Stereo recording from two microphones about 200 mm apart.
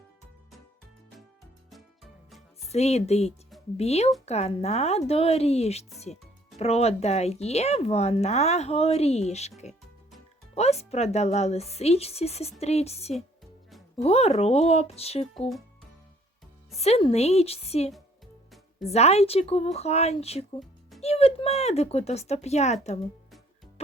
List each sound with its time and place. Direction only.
2.6 s speech: 30° left (ahead or behind)
16.7 s speech: 30° left (ahead or behind)